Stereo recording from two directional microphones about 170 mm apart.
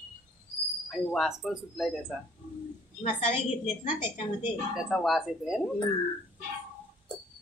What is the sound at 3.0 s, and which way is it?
Speech, 45° left (ahead or behind).